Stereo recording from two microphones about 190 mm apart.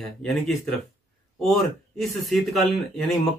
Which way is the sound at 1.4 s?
Centre (ahead or behind).